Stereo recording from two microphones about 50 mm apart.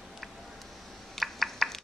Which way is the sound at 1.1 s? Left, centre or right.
Centre.